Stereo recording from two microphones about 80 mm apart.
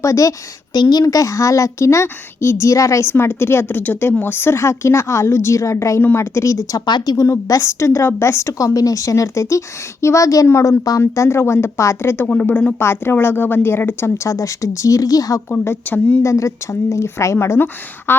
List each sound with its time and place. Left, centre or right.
0.0 s a woman's voice: left
0.7 s a woman's voice: left
6.8 s a woman's voice: left
7.3 s a woman's voice: left
12.5 s a woman's voice: centre
14.3 s speech: left
15.4 s a woman's voice: left
16.2 s a woman's voice: left